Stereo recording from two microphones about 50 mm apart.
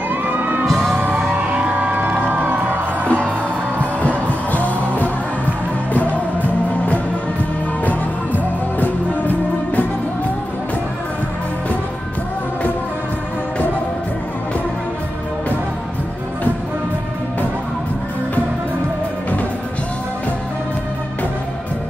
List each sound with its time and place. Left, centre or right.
0.1 s music: right
0.7 s music: centre
0.9 s music: right
4.5 s music: left
7.8 s music: left